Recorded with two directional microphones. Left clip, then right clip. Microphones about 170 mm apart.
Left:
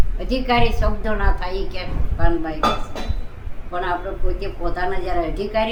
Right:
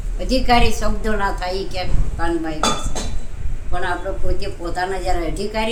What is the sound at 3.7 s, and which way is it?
A man's voice, 25° right (ahead or behind).